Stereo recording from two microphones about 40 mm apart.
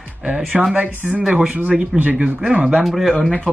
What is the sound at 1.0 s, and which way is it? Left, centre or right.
Speech, right.